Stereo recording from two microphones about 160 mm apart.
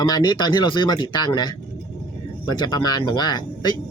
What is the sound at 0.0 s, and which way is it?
A man's voice, 25° left (ahead or behind).